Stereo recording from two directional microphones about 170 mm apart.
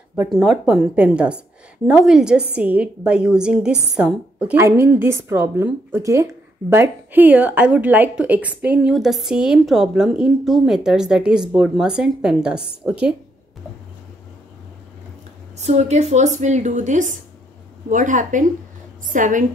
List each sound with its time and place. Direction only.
0.1 s a woman's voice: 5° right (ahead or behind)
15.5 s a woman's voice: 40° right (ahead or behind)